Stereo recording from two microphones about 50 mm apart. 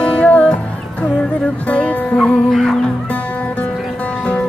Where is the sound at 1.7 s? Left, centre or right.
Left.